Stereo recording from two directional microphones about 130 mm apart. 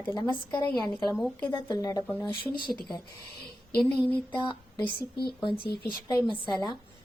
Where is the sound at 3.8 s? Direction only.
5° left (ahead or behind).